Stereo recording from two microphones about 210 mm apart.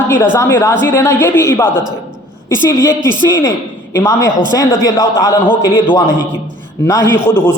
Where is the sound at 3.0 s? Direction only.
20° right (ahead or behind).